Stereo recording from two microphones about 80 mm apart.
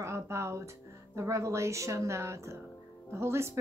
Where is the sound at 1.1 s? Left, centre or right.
Right.